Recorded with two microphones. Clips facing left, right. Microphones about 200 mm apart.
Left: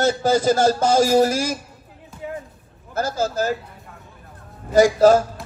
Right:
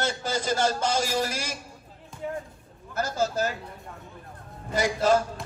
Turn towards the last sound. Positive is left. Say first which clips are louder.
# left 9 dB
turn(degrees=45)  # may be behind; listen again after turning